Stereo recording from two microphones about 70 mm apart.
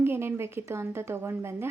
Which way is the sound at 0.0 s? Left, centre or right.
Right.